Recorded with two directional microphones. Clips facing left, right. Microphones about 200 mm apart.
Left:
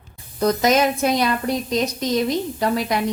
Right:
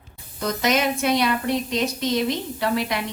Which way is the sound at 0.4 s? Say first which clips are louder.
Left 5 dB; 40° left (ahead or behind).